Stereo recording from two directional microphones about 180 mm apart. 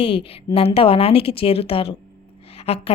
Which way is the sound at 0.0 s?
30° left (ahead or behind).